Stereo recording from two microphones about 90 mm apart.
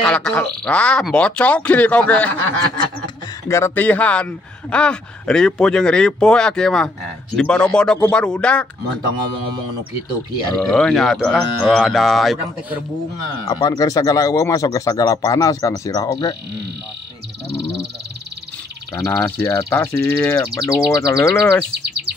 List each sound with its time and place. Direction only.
0.0 s a man's voice: 15° left (ahead or behind)
3.4 s speech: 30° left (ahead or behind)
3.7 s a man's voice: 20° left (ahead or behind)
10.5 s speech: 10° left (ahead or behind)
13.5 s speech: 45° left (ahead or behind)
19.2 s speech: 30° left (ahead or behind)